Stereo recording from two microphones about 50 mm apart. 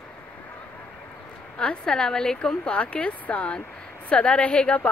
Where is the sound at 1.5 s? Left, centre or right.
Centre.